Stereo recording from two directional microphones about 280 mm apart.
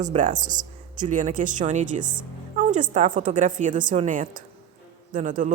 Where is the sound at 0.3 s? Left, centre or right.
Centre.